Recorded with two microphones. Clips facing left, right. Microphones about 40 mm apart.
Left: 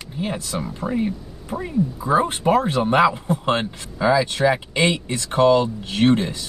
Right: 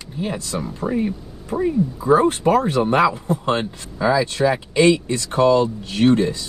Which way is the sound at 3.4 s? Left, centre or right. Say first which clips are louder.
Even; centre.